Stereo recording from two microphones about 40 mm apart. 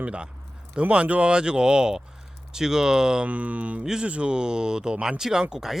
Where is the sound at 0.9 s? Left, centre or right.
Right.